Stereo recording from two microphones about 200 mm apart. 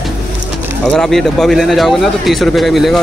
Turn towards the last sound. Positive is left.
turn(degrees=0)  # may be behind; listen again after turning